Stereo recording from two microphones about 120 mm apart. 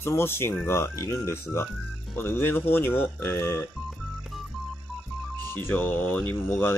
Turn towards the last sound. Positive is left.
turn(degrees=20)  # may be behind; listen again after turning